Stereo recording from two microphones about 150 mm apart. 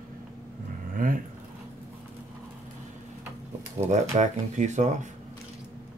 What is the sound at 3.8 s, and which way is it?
Speech, 50° right (ahead or behind).